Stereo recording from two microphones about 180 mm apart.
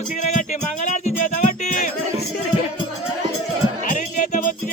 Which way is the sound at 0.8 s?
45° left (ahead or behind).